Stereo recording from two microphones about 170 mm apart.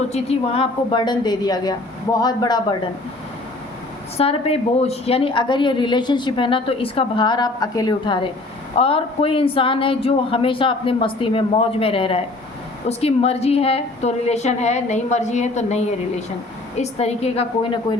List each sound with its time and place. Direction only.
0.1 s a woman's voice: 40° left (ahead or behind)
4.2 s a woman's voice: 35° left (ahead or behind)